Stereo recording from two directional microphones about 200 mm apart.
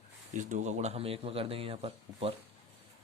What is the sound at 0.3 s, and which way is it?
Speech, 35° right (ahead or behind).